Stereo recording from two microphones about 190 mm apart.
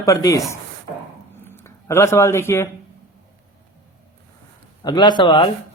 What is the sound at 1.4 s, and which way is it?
Speech, 10° left (ahead or behind).